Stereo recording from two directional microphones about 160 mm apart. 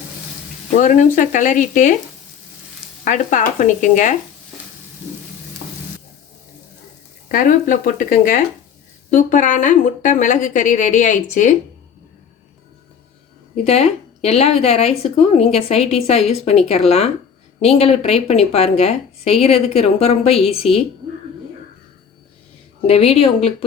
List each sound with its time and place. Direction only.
0.8 s a woman's voice: 50° left (ahead or behind)
3.0 s a woman's voice: 55° left (ahead or behind)
7.3 s a woman's voice: 55° left (ahead or behind)
13.7 s a woman's voice: 40° left (ahead or behind)
22.9 s a woman's voice: 40° left (ahead or behind)